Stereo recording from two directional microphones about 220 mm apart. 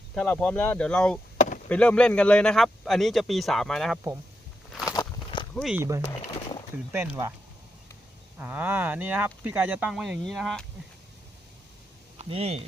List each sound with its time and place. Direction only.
0.1 s speech: 5° left (ahead or behind)
4.9 s walk: 20° left (ahead or behind)
5.5 s speech: centre (ahead or behind)
6.9 s speech: 10° right (ahead or behind)
8.4 s speech: 10° right (ahead or behind)
12.2 s speech: 25° right (ahead or behind)